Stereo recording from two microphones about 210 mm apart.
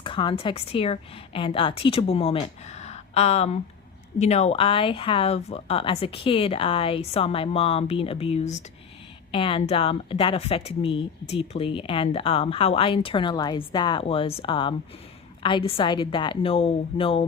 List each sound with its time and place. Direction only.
0.0 s speech: 25° left (ahead or behind)